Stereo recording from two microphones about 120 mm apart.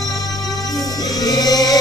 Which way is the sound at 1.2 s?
30° left (ahead or behind).